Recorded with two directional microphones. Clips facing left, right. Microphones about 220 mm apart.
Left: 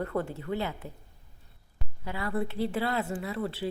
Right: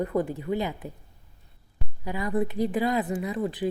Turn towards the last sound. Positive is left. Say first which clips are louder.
# right 4 dB
turn(degrees=-15)  # may be behind; listen again after turning